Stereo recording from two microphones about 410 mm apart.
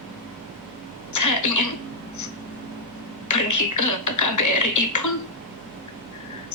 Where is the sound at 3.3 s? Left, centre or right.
Left.